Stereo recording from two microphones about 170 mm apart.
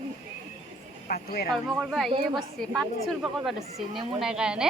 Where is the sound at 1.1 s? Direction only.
65° left (ahead or behind).